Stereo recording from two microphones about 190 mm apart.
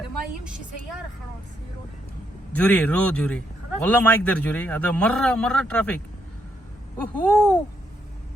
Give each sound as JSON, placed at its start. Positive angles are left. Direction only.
{"t": 2.5, "sound": "a man's voice", "side_deg": 5}
{"t": 7.0, "sound": "a man's voice", "side_deg": 5}